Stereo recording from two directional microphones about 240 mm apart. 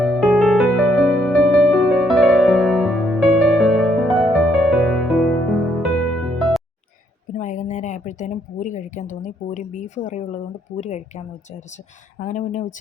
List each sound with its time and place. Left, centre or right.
0.0 s music: centre
7.3 s a sound: left
10.8 s speech: left
12.2 s speech: left